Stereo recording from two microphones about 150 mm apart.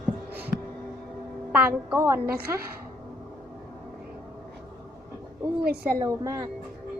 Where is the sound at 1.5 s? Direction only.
10° right (ahead or behind).